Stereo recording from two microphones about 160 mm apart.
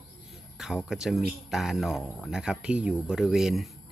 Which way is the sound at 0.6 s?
Centre (ahead or behind).